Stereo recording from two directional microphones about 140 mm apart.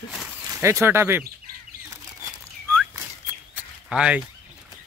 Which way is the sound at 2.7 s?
15° right (ahead or behind).